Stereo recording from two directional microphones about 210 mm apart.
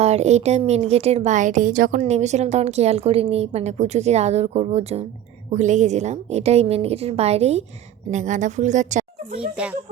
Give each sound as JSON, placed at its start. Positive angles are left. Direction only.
{"t": 0.0, "sound": "a woman's voice", "side_deg": -30}